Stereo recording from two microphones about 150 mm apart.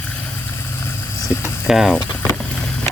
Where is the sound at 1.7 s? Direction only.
Centre (ahead or behind).